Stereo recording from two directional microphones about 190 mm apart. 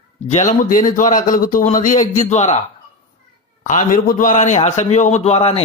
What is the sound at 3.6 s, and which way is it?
Speech, 40° left (ahead or behind).